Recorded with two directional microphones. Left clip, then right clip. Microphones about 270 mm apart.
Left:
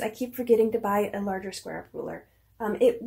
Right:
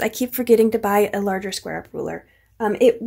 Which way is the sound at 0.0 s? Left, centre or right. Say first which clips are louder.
Right 8 dB; right.